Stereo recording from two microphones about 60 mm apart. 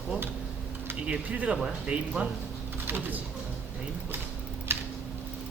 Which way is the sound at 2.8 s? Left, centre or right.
Right.